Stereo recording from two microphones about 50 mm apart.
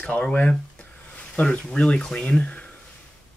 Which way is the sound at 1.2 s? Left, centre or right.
Left.